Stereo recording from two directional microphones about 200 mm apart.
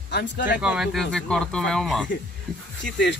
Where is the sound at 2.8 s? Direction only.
60° left (ahead or behind).